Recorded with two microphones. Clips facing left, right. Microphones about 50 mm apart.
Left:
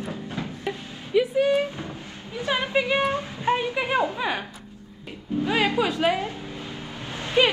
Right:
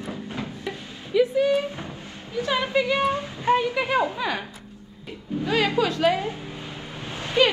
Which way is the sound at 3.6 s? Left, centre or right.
Left.